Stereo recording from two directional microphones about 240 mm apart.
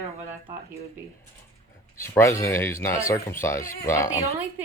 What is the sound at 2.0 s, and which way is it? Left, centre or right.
Speech, centre.